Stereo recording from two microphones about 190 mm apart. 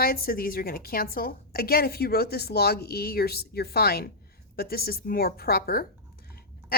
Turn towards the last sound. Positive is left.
turn(degrees=50)  # may be behind; listen again after turning